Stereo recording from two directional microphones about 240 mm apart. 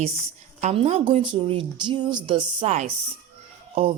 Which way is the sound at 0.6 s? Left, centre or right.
Right.